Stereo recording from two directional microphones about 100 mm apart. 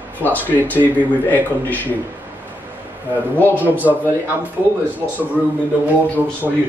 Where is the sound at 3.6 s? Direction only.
15° right (ahead or behind).